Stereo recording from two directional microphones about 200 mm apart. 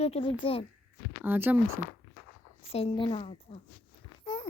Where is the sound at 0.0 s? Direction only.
30° left (ahead or behind).